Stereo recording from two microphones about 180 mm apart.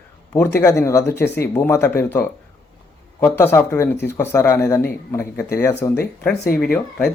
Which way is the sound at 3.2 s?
15° left (ahead or behind).